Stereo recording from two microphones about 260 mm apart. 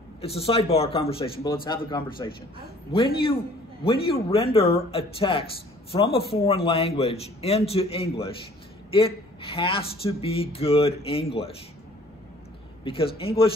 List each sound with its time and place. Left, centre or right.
0.2 s speech: left
3.8 s speech: left
12.8 s speech: left